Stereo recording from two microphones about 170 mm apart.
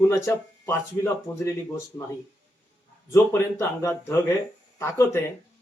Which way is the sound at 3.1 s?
15° left (ahead or behind).